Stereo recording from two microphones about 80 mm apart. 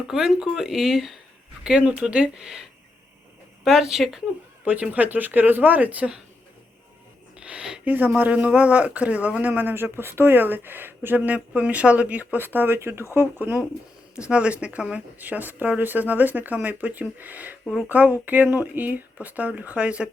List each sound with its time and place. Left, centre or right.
0.1 s speech: centre
3.6 s speech: centre
4.6 s speech: centre
7.3 s a sound: centre
8.2 s speech: centre